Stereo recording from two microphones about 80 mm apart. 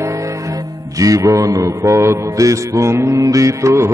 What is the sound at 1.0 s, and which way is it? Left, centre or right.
Mantra, right.